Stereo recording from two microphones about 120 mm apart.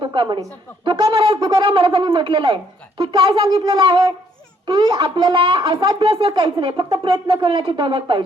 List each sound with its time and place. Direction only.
0.0 s a woman's voice: 45° right (ahead or behind)
3.6 s a sound: 40° right (ahead or behind)
4.6 s speech: 45° right (ahead or behind)